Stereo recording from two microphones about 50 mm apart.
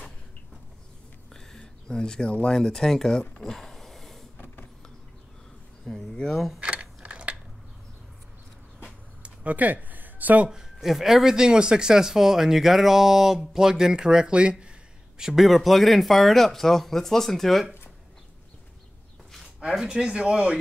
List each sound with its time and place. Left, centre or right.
1.3 s a sound: centre
2.4 s speech: centre
5.9 s a sound: centre
6.3 s speech: centre
6.6 s keys jangling: right
9.2 s a sound: right
10.4 s speech: centre
15.1 s speech: centre
19.7 s speech: centre